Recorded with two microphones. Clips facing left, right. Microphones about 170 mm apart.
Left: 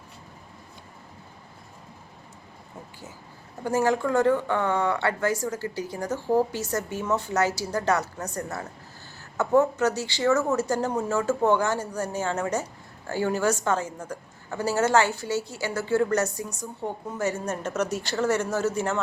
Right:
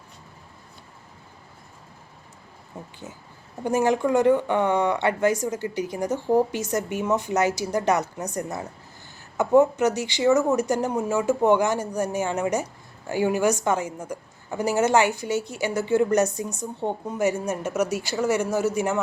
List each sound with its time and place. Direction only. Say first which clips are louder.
3.6 s a woman's voice: right 2 dB; 20° right (ahead or behind)